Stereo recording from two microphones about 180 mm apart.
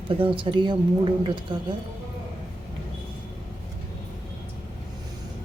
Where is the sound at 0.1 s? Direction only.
30° right (ahead or behind).